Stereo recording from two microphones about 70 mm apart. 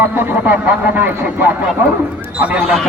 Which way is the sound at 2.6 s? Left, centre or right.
Centre.